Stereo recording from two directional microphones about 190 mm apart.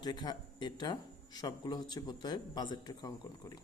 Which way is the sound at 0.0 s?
25° left (ahead or behind).